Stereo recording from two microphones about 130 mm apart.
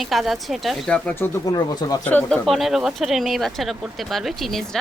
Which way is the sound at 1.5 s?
30° left (ahead or behind).